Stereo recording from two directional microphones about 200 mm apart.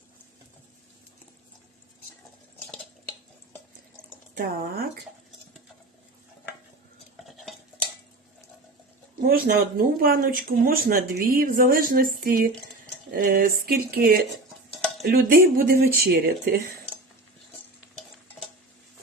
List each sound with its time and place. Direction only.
4.4 s a woman's voice: 50° right (ahead or behind)
7.3 s stir: centre (ahead or behind)
9.2 s a woman's voice: 45° right (ahead or behind)